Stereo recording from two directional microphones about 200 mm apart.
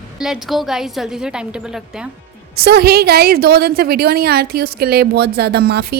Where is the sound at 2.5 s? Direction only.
50° right (ahead or behind).